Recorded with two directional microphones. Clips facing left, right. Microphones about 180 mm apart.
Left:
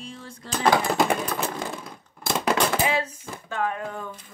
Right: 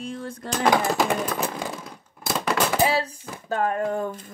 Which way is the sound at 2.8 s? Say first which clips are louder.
Right 3 dB; 35° right (ahead or behind).